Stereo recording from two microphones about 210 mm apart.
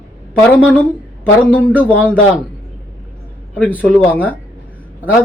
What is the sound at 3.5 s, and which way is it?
Speech, 5° left (ahead or behind).